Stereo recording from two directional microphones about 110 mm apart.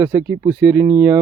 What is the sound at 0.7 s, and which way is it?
Speech, 20° right (ahead or behind).